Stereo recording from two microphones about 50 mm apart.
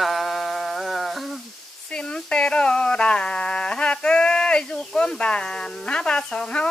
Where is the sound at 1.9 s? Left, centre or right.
Centre.